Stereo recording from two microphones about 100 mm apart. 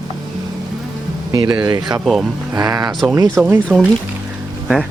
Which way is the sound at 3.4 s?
Centre (ahead or behind).